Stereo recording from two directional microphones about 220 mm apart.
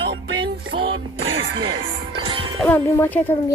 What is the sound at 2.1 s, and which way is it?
Music, 25° right (ahead or behind).